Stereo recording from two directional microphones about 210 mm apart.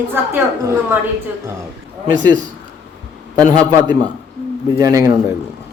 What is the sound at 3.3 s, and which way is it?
A man's voice, 20° right (ahead or behind).